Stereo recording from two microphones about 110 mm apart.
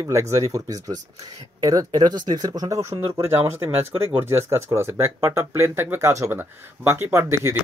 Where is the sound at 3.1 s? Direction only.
25° right (ahead or behind).